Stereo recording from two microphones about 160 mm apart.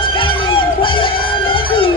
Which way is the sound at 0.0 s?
35° left (ahead or behind).